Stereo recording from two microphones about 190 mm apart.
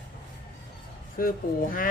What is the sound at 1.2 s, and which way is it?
Speech, 50° left (ahead or behind).